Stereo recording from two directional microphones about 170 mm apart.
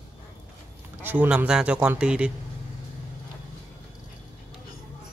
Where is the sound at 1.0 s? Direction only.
10° right (ahead or behind).